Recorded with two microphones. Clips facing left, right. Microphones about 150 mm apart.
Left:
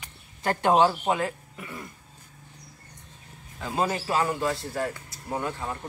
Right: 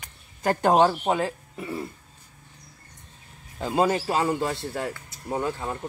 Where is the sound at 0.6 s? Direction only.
40° right (ahead or behind).